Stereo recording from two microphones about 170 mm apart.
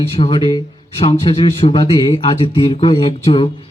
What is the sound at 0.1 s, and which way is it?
Speech, 30° left (ahead or behind).